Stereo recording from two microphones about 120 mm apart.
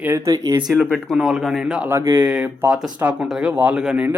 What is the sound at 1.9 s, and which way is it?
Speech, 20° right (ahead or behind).